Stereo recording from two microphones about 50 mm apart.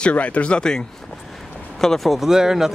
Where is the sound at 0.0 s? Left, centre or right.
Left; by 2.1 s centre.